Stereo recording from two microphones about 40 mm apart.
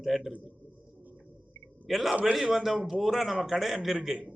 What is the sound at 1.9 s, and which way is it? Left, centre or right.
A man's voice, centre.